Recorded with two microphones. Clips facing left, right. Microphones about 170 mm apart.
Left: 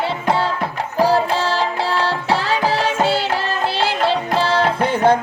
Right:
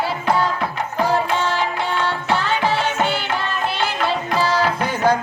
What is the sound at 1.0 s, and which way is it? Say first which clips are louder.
Music: left 3 dB; 35° left (ahead or behind).